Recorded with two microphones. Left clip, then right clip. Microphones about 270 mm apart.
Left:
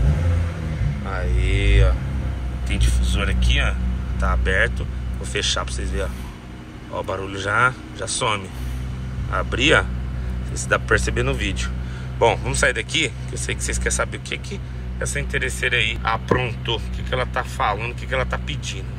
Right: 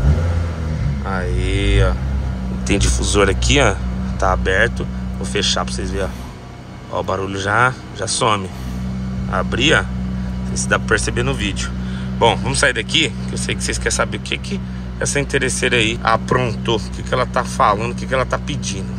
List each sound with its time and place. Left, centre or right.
1.0 s mantra: centre
2.8 s speech: centre